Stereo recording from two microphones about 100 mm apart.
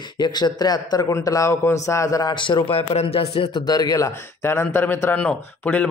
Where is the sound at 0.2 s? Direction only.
45° left (ahead or behind).